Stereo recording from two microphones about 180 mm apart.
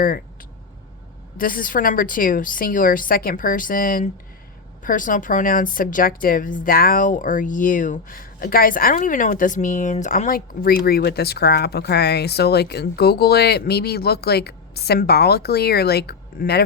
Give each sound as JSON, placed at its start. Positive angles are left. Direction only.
{"t": 1.4, "sound": "a woman's voice", "side_deg": 50}